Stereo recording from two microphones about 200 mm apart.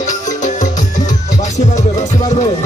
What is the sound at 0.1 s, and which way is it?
Music, 40° left (ahead or behind).